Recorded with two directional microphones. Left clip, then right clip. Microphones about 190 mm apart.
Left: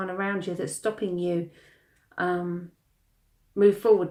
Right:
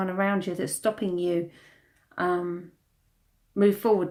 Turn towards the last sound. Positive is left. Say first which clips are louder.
# left 3 dB
turn(degrees=-40)  # may be behind; listen again after turning